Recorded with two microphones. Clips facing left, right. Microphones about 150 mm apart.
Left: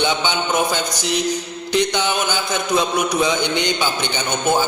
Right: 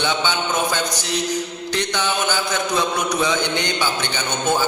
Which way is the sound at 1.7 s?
15° left (ahead or behind).